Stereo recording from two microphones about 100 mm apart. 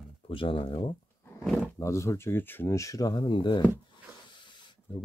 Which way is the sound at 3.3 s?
55° left (ahead or behind).